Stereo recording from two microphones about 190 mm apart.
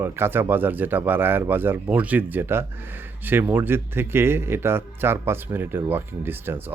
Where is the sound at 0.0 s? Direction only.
10° right (ahead or behind).